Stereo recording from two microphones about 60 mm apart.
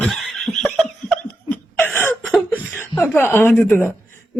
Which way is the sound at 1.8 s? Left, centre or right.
Left.